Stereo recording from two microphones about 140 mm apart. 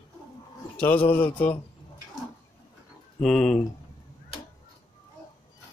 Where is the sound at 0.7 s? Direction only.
10° left (ahead or behind).